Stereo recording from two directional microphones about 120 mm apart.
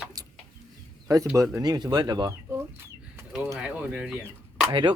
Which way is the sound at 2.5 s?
20° right (ahead or behind).